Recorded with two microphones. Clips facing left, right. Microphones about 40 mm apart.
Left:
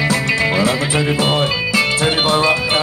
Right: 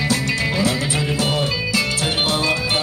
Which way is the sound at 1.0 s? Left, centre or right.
Left.